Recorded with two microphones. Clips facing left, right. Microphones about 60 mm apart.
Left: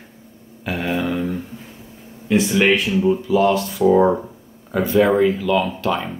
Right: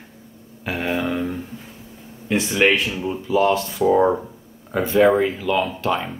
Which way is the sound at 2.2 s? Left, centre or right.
Centre.